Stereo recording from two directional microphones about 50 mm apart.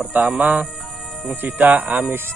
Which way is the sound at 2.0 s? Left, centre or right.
Right.